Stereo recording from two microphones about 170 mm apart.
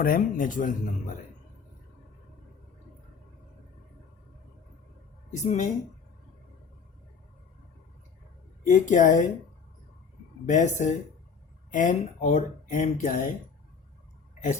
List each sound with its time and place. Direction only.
0.0 s speech: 55° left (ahead or behind)
5.3 s speech: 45° left (ahead or behind)
8.6 s speech: 45° left (ahead or behind)
10.5 s speech: 45° left (ahead or behind)